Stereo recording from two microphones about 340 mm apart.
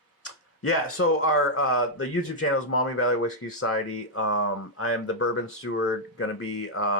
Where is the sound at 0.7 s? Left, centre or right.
Left.